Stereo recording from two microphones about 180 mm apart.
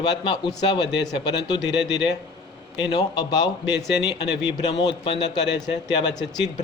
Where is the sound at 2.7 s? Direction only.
25° left (ahead or behind).